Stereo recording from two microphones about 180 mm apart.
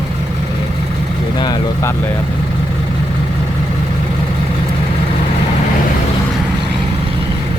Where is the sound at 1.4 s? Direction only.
20° left (ahead or behind).